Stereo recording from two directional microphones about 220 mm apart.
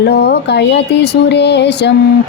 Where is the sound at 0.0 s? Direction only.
50° left (ahead or behind).